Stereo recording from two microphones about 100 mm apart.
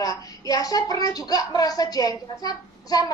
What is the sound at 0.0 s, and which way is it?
A woman's voice, 35° left (ahead or behind).